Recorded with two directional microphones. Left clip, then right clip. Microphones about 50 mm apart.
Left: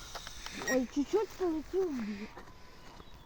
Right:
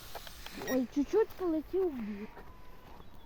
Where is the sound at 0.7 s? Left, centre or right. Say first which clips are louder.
Right 3 dB; right.